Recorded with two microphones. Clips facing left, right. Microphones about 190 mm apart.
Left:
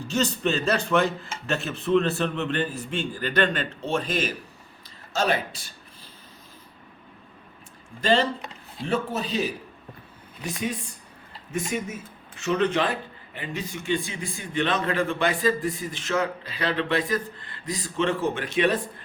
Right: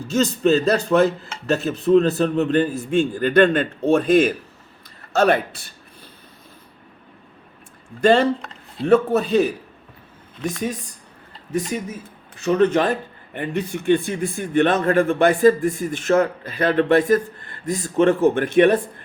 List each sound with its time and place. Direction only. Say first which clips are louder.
0.1 s speech: right 8 dB; 40° right (ahead or behind); by 5.4 s 55° right (ahead or behind)
8.0 s speech: right 7 dB; 55° right (ahead or behind)
11.5 s speech: right 4 dB; 35° right (ahead or behind); by 18.8 s 55° right (ahead or behind)